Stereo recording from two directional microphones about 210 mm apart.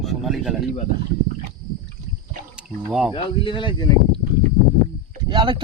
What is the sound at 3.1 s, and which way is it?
Speech, 25° left (ahead or behind).